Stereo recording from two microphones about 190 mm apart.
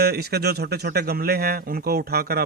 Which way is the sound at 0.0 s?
55° right (ahead or behind).